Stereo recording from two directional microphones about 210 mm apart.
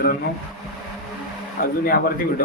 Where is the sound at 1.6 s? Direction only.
45° left (ahead or behind).